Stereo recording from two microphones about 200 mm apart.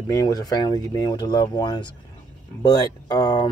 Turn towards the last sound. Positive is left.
turn(degrees=20)  # may be behind; listen again after turning